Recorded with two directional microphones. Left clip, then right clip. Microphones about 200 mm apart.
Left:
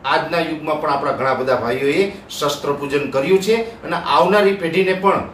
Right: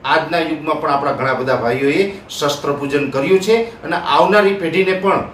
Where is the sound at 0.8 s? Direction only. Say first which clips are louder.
Right 1 dB; 5° right (ahead or behind).